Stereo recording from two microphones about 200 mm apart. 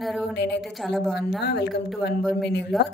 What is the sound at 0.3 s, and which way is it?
Speech, 60° left (ahead or behind).